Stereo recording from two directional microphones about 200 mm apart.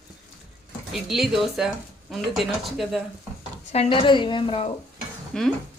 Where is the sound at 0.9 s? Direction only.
Centre (ahead or behind).